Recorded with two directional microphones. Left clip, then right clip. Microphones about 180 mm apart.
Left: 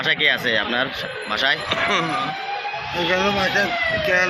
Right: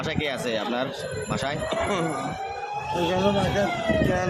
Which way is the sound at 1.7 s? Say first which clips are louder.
Left 6 dB; 30° right (ahead or behind).